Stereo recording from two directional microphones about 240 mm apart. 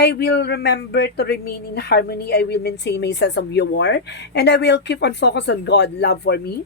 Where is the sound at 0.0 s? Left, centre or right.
Left.